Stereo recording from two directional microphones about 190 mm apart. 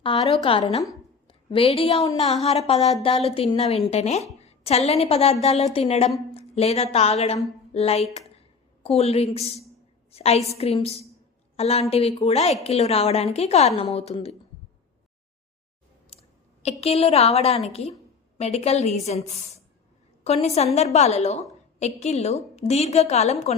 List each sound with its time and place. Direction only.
0.0 s a woman's voice: 25° left (ahead or behind)
16.1 s clicking: 30° left (ahead or behind)
16.8 s a woman's voice: 30° left (ahead or behind)